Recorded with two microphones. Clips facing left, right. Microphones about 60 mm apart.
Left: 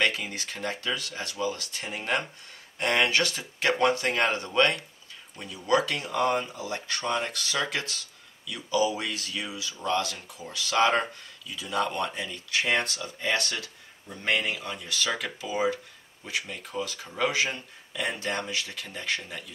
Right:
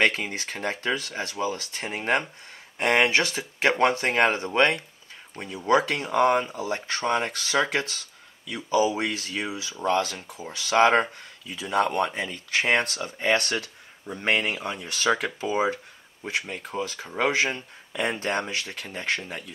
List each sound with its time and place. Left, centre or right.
0.0 s speech: right